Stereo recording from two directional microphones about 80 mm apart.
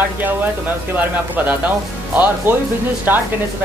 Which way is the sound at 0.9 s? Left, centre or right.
Right.